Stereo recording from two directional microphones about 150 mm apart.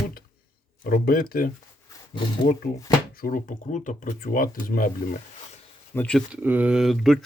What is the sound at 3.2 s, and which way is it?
Speech, 65° left (ahead or behind).